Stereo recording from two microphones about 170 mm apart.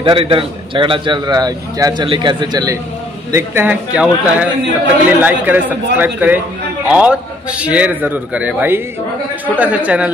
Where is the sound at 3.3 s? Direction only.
10° right (ahead or behind).